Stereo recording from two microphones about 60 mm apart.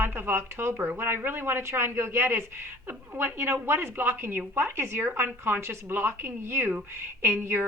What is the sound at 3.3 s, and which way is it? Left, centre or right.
A woman's voice, right.